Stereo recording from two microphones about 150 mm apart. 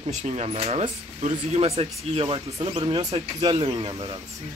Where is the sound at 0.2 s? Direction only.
45° right (ahead or behind).